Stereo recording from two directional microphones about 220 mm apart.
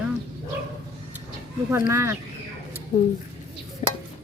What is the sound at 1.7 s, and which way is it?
Speech, 15° right (ahead or behind).